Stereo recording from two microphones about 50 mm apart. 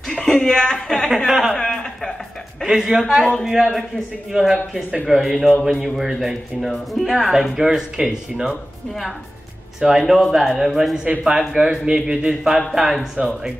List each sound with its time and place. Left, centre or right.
0.1 s speech: centre
1.1 s speech: centre
1.5 s a sound: centre
2.6 s a man's voice: centre
7.5 s speech: centre
9.8 s a man's voice: centre
11.1 s speech: centre
12.7 s a man's voice: centre